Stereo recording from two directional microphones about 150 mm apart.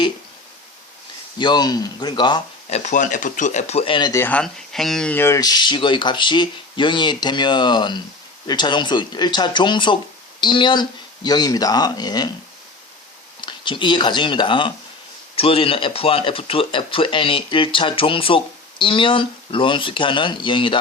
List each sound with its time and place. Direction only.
1.4 s speech: 30° left (ahead or behind)
2.6 s speech: 50° left (ahead or behind)
4.1 s speech: 15° left (ahead or behind)
13.4 s speech: 30° left (ahead or behind)